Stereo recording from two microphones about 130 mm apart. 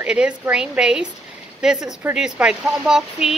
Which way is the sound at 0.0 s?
10° right (ahead or behind).